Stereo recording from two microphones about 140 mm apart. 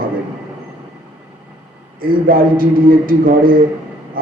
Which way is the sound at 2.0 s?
90° right.